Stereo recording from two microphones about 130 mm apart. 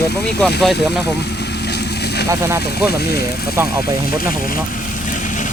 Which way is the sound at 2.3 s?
20° right (ahead or behind).